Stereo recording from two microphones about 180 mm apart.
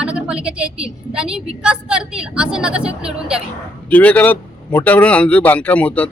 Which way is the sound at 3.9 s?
10° left (ahead or behind).